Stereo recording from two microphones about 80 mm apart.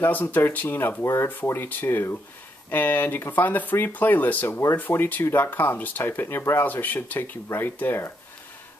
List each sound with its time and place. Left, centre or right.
0.0 s speech: left
4.5 s speech: left